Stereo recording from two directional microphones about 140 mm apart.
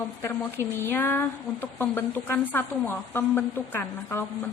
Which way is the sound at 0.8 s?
15° left (ahead or behind).